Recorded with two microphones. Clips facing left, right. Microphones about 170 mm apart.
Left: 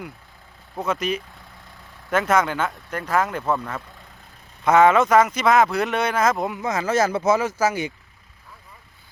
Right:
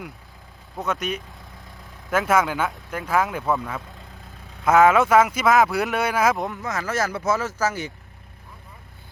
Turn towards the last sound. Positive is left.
turn(degrees=15)  # may be behind; listen again after turning